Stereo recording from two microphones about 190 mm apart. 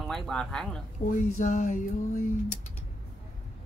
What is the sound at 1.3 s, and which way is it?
Music, 40° left (ahead or behind).